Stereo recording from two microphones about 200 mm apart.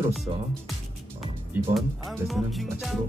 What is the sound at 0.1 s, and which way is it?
Speech, centre (ahead or behind).